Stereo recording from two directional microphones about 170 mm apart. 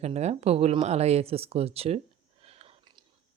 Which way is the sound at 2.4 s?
35° right (ahead or behind).